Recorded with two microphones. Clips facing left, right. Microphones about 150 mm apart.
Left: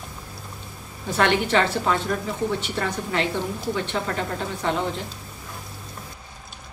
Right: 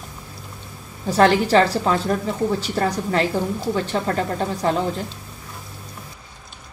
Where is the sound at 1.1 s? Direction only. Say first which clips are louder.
Right 5 dB; 35° right (ahead or behind).